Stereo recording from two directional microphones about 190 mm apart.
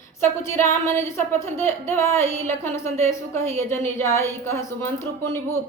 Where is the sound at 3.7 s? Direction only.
15° left (ahead or behind).